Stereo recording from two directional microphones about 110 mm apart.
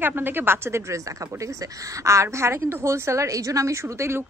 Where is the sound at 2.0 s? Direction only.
25° right (ahead or behind).